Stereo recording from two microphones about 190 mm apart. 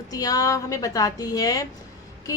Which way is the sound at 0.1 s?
20° left (ahead or behind).